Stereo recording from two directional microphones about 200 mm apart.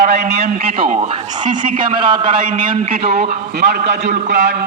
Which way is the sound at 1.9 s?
25° right (ahead or behind).